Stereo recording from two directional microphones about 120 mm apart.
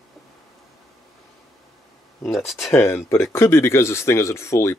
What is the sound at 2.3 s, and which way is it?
Speech, centre (ahead or behind).